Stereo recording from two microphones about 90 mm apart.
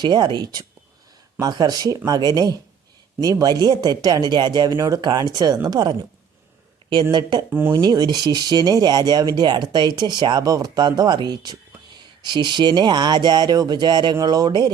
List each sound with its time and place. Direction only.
0.0 s speech: 55° right (ahead or behind)
7.1 s speech: 60° right (ahead or behind)